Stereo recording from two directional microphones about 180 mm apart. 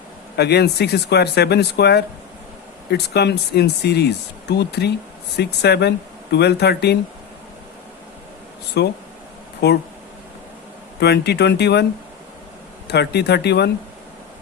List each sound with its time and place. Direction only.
0.3 s speech: 65° left (ahead or behind)
8.8 s speech: 70° left (ahead or behind)
11.0 s speech: 65° left (ahead or behind)
12.9 s speech: 65° left (ahead or behind)